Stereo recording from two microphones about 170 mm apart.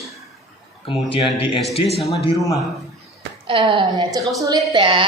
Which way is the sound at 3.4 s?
30° right (ahead or behind).